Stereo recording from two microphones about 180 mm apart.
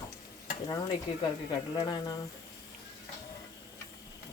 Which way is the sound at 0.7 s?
20° left (ahead or behind).